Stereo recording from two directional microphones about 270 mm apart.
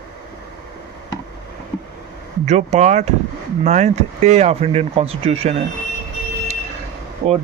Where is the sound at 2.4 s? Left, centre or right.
Right.